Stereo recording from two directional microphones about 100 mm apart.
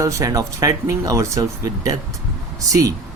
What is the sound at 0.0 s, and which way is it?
Speech, 35° right (ahead or behind).